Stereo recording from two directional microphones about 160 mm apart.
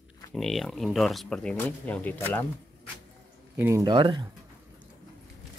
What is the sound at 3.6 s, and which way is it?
Speech, 15° right (ahead or behind).